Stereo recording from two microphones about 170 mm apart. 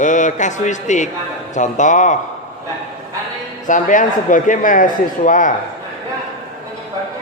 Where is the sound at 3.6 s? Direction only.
50° left (ahead or behind).